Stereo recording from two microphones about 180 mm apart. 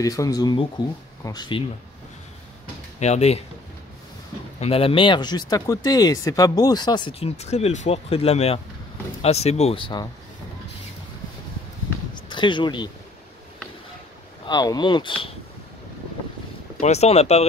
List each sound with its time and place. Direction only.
0.0 s speech: 20° left (ahead or behind)
3.0 s speech: 35° left (ahead or behind)
4.6 s speech: 35° left (ahead or behind)
12.1 s a sound: 25° left (ahead or behind)
14.4 s speech: 20° left (ahead or behind)
16.8 s speech: 35° left (ahead or behind)